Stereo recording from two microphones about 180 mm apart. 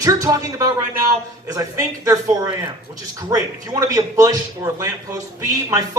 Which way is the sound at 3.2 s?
20° right (ahead or behind).